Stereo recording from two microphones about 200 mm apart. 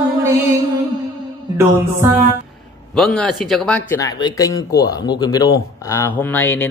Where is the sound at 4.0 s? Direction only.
20° left (ahead or behind).